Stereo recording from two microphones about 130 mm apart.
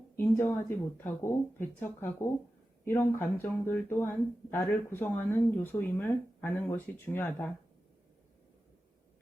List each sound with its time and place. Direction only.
0.2 s speech: 20° left (ahead or behind)